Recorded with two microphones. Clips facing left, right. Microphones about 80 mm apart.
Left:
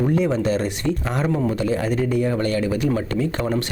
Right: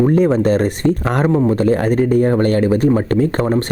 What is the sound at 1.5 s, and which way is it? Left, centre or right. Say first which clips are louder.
A man's voice: right 7 dB; right.